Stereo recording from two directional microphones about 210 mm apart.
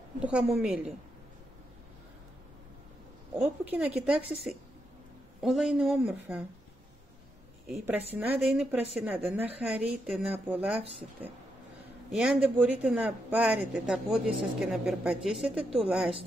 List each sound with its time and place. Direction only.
0.2 s a man's voice: 5° right (ahead or behind)
3.6 s a man's voice: 5° right (ahead or behind)
7.6 s a man's voice: 5° right (ahead or behind)
12.1 s a man's voice: centre (ahead or behind)